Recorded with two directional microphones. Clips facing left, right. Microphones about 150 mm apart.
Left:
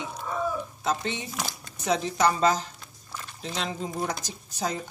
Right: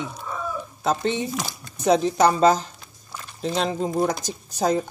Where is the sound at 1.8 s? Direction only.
35° right (ahead or behind).